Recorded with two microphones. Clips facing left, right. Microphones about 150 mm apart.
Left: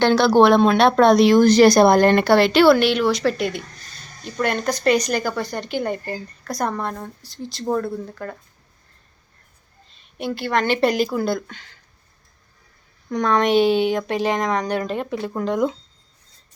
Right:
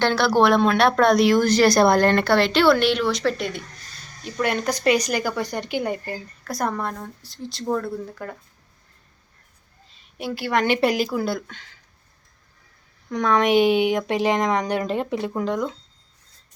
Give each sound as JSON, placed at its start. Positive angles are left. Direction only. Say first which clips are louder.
{"t": 0.0, "sound": "a woman's voice", "louder": "left 4 dB", "side_deg": 20}
{"t": 10.2, "sound": "speech", "louder": "left 1 dB", "side_deg": -5}
{"t": 13.1, "sound": "speech", "louder": "left 1 dB", "side_deg": -5}
{"t": 15.3, "sound": "speech", "louder": "left 2 dB", "side_deg": 0}